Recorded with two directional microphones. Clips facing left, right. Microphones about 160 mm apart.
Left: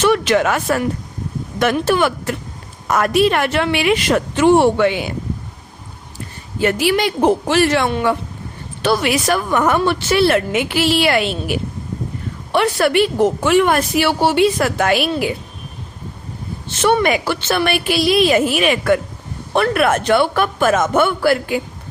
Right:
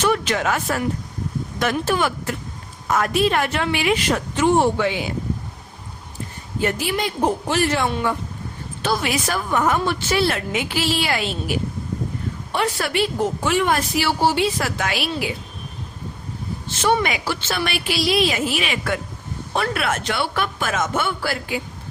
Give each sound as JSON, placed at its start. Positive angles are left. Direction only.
{"t": 0.0, "sound": "a woman's voice", "side_deg": 80}
{"t": 6.6, "sound": "a woman's voice", "side_deg": 80}
{"t": 16.8, "sound": "a woman's voice", "side_deg": 55}